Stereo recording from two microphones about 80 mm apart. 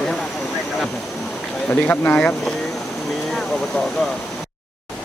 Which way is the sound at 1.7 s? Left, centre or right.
Left.